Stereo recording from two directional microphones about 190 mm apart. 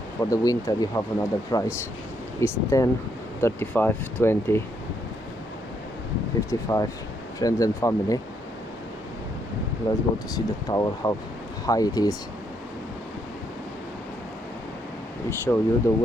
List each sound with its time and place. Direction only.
0.2 s speech: 15° left (ahead or behind)
6.5 s speech: 15° left (ahead or behind)
9.9 s speech: 15° left (ahead or behind)
15.5 s speech: 15° left (ahead or behind)